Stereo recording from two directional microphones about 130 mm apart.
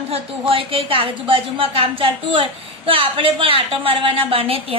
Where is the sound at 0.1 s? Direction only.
45° right (ahead or behind).